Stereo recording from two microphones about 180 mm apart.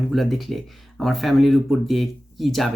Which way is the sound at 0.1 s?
Centre (ahead or behind).